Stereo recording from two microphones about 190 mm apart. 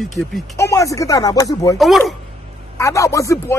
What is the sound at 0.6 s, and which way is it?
Speech, 15° left (ahead or behind).